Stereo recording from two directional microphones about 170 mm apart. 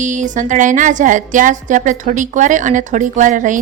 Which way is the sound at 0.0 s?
45° right (ahead or behind).